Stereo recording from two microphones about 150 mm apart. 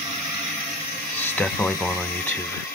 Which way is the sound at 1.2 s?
10° left (ahead or behind).